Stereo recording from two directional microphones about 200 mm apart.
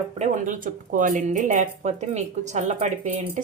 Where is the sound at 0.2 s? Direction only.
40° right (ahead or behind).